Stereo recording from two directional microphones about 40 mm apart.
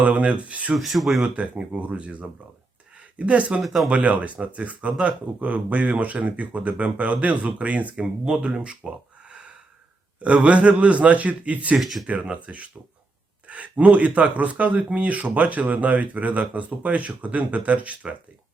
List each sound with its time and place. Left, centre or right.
0.0 s speech: right
0.8 s speech: centre
1.8 s speech: right
3.6 s speech: centre
3.8 s speech: right
7.9 s speech: right
9.3 s snort: right
10.2 s speech: right
11.8 s speech: centre
12.0 s speech: right